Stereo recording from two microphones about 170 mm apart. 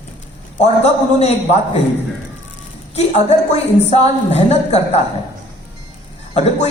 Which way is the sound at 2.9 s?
40° left (ahead or behind).